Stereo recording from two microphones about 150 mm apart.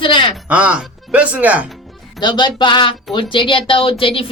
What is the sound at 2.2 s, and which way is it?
Speech, 30° left (ahead or behind).